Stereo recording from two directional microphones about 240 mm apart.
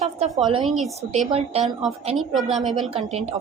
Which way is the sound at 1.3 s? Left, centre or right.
Right.